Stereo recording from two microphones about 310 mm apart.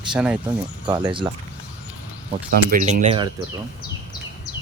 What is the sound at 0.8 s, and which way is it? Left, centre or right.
Speech, centre.